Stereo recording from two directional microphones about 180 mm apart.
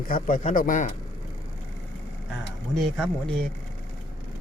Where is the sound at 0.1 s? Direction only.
45° left (ahead or behind).